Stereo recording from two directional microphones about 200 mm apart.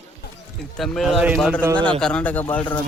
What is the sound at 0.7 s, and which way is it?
A man's voice, centre (ahead or behind).